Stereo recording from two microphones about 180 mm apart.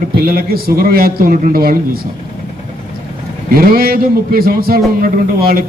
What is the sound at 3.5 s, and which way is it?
A man's voice, 55° right (ahead or behind).